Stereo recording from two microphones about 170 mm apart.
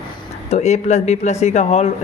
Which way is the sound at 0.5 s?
40° left (ahead or behind).